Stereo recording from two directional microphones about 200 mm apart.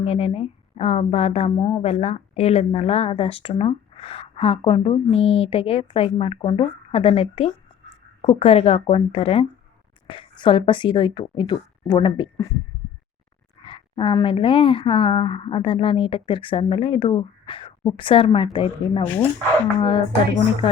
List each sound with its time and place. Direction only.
0.0 s a woman's voice: 30° left (ahead or behind)
13.7 s a woman's voice: 25° left (ahead or behind)
19.0 s speech: 10° left (ahead or behind)
19.8 s a woman's voice: 25° left (ahead or behind)